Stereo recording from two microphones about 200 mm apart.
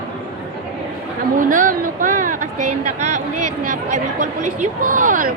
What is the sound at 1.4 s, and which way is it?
Speech, 40° right (ahead or behind).